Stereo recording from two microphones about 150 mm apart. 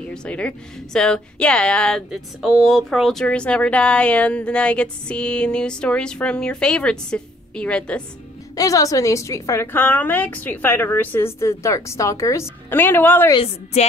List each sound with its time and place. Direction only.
0.0 s a woman's voice: 5° left (ahead or behind)
8.5 s a woman's voice: 20° left (ahead or behind)
13.3 s a woman's voice: 40° left (ahead or behind)